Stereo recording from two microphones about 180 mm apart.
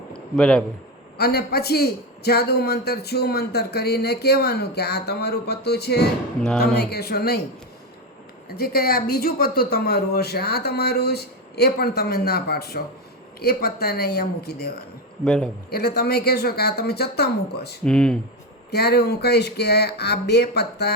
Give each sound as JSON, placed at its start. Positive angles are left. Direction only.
{"t": 0.1, "sound": "a sound", "side_deg": 5}
{"t": 1.2, "sound": "a man's voice", "side_deg": 60}
{"t": 8.4, "sound": "a man's voice", "side_deg": 55}
{"t": 15.2, "sound": "speech", "side_deg": 5}
{"t": 15.7, "sound": "a man's voice", "side_deg": 60}
{"t": 17.8, "sound": "speech", "side_deg": 5}
{"t": 18.7, "sound": "a man's voice", "side_deg": 60}